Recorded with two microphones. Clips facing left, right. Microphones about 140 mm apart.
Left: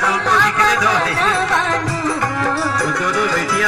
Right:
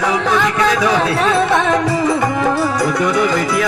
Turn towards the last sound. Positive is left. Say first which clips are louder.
# right 3 dB
turn(degrees=0)  # may be behind; listen again after turning